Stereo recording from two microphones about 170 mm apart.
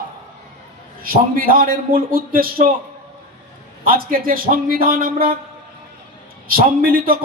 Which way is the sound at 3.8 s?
55° right (ahead or behind).